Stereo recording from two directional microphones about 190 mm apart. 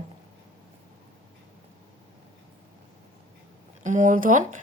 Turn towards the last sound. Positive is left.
turn(degrees=-45)  # may be behind; listen again after turning